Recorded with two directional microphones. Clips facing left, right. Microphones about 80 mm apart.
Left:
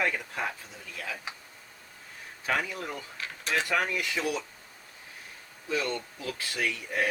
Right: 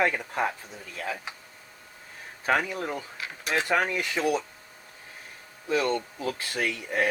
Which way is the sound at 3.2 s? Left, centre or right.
Centre.